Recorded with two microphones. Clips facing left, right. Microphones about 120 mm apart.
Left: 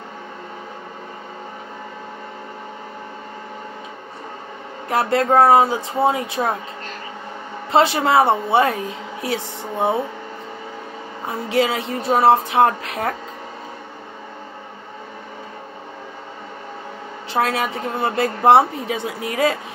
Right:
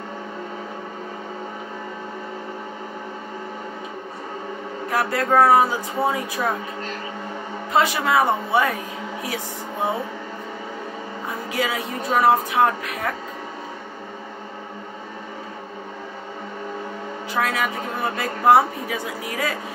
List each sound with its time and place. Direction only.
4.8 s a woman's voice: 25° left (ahead or behind)
7.7 s a woman's voice: 30° left (ahead or behind)
11.4 s a woman's voice: 30° left (ahead or behind)
17.3 s a woman's voice: 30° left (ahead or behind)